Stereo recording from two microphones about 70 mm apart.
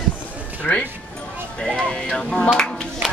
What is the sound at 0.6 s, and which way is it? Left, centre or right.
Music, centre.